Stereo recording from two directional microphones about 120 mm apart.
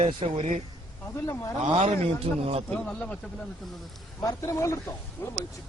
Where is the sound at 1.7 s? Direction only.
60° right (ahead or behind).